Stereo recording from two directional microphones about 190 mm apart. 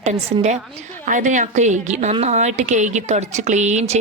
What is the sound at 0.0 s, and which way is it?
A woman's voice, 35° right (ahead or behind).